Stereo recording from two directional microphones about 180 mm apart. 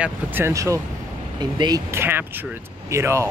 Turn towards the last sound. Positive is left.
turn(degrees=-15)  # may be behind; listen again after turning